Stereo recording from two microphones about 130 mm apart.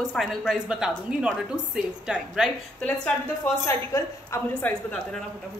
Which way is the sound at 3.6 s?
20° left (ahead or behind).